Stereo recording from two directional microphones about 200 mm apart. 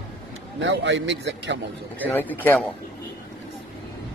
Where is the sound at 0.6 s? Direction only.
65° right (ahead or behind).